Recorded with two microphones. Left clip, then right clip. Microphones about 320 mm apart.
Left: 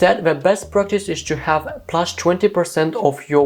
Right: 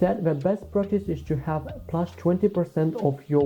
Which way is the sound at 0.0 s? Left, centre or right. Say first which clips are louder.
Left 9 dB; centre.